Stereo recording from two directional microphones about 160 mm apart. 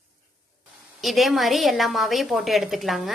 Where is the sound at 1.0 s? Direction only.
Centre (ahead or behind).